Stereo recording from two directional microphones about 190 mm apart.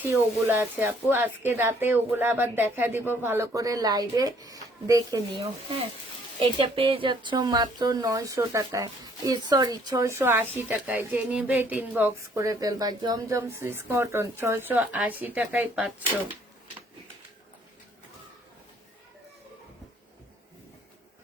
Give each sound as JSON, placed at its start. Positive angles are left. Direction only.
{"t": 0.0, "sound": "speech", "side_deg": -10}
{"t": 5.4, "sound": "speech", "side_deg": -30}